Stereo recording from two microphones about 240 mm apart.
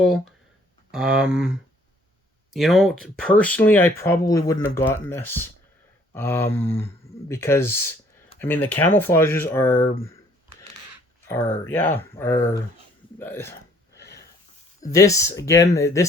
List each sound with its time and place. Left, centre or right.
0.0 s speech: centre
2.5 s speech: centre
11.3 s speech: centre
13.9 s a sound: left
14.8 s speech: centre